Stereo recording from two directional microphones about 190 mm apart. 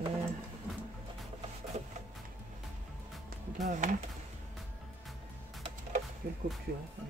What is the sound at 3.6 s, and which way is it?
Speech, 40° right (ahead or behind).